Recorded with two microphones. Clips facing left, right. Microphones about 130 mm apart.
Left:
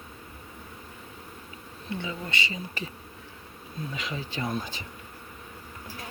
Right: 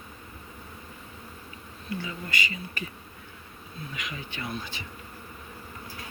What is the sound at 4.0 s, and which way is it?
Speech, 35° left (ahead or behind).